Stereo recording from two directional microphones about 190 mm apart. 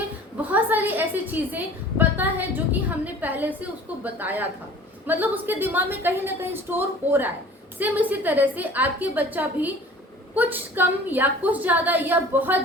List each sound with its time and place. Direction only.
0.4 s a woman's voice: 10° right (ahead or behind)